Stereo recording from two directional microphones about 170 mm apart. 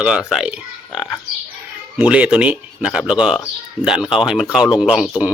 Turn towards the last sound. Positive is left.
turn(degrees=-5)  # may be behind; listen again after turning